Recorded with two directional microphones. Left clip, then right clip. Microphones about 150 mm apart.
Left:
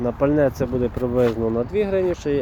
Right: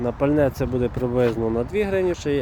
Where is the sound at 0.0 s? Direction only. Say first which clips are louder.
Left 1 dB; 5° right (ahead or behind).